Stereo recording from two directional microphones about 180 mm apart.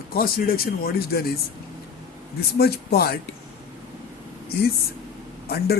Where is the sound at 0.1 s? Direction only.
55° left (ahead or behind).